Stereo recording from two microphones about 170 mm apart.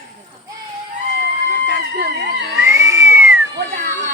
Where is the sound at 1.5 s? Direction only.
65° right (ahead or behind).